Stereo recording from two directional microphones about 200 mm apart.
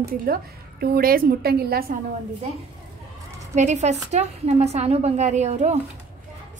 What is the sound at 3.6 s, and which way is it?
Speech, 35° right (ahead or behind).